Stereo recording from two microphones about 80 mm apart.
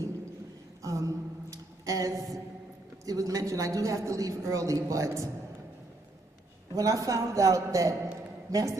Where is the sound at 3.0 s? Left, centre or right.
Right.